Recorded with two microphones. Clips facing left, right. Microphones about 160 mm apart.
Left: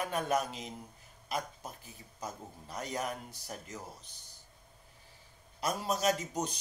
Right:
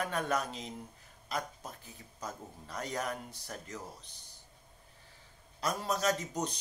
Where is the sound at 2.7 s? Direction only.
20° left (ahead or behind).